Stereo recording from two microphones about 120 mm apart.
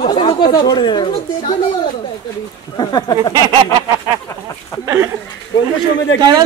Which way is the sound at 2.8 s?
35° left (ahead or behind).